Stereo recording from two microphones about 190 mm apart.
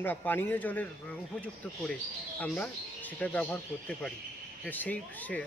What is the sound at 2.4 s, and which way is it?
Speech, 10° left (ahead or behind).